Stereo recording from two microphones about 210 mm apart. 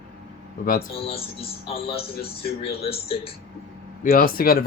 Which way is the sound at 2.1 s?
45° left (ahead or behind).